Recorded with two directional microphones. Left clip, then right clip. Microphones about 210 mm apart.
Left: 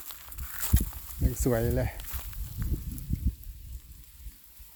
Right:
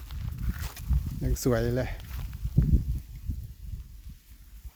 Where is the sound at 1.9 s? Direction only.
55° left (ahead or behind).